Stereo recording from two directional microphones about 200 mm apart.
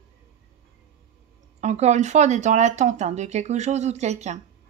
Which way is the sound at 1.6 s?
35° right (ahead or behind).